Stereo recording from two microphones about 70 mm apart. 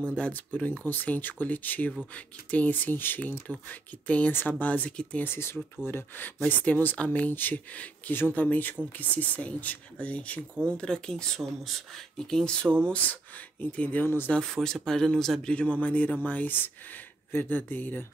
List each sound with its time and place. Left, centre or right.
0.1 s speech: left
5.2 s speech: left; by 12.7 s centre
12.8 s speech: left
14.3 s speech: centre
15.5 s speech: centre